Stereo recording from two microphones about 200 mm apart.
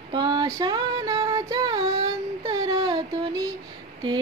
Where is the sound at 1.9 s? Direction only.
20° right (ahead or behind).